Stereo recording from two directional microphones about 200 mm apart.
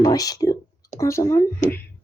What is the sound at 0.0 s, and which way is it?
Speech, 20° left (ahead or behind).